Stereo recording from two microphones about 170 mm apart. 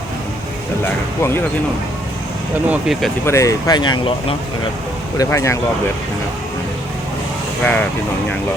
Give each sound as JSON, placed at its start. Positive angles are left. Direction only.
{"t": 0.9, "sound": "speech", "side_deg": 15}
{"t": 2.6, "sound": "speech", "side_deg": -5}
{"t": 3.2, "sound": "speech", "side_deg": 20}
{"t": 7.6, "sound": "speech", "side_deg": 10}